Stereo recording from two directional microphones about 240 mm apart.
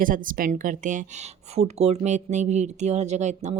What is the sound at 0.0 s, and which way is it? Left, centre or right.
A woman's voice, right.